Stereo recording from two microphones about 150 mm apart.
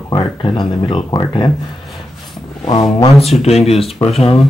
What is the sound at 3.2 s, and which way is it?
Speech, 45° left (ahead or behind).